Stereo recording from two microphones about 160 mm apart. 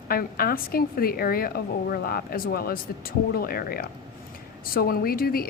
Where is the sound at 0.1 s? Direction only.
70° left (ahead or behind).